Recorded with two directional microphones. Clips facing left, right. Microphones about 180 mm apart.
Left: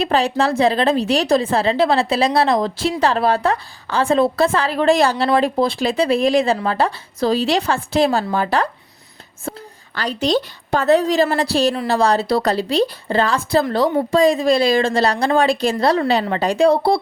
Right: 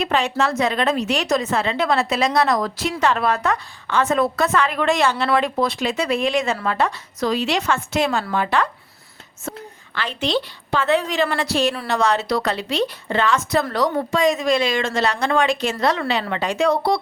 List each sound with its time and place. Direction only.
0.0 s speech: 35° left (ahead or behind)